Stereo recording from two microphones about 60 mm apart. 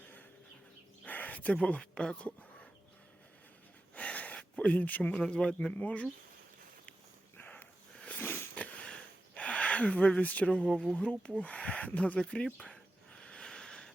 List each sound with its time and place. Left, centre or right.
1.0 s speech: left
3.9 s gasp: left
5.2 s speech: centre
7.3 s dog: left
8.0 s a sound: left
10.2 s speech: left
12.5 s a sound: centre